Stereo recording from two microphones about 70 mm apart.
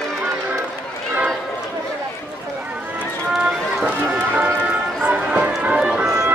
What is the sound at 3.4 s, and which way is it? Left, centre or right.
Run, centre.